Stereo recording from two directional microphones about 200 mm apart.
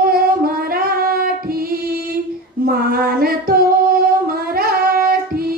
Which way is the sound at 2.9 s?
45° right (ahead or behind).